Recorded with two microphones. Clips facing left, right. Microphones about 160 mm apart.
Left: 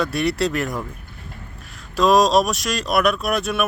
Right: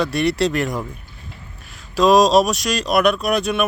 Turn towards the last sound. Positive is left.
turn(degrees=0)  # may be behind; listen again after turning